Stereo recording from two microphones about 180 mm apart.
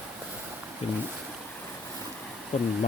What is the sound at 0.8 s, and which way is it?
Speech, 35° left (ahead or behind).